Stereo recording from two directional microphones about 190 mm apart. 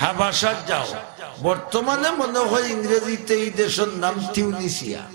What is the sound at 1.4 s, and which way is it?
A man's voice, 35° right (ahead or behind).